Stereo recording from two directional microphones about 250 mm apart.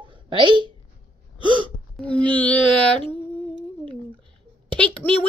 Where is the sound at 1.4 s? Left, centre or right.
Centre.